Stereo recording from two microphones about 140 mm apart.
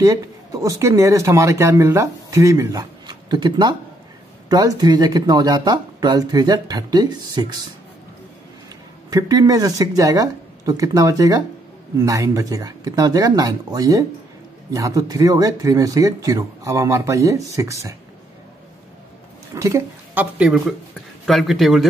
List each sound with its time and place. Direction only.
0.0 s speech: 25° right (ahead or behind)
9.1 s speech: 25° right (ahead or behind)
19.5 s speech: 20° right (ahead or behind)
20.3 s speech: 5° right (ahead or behind)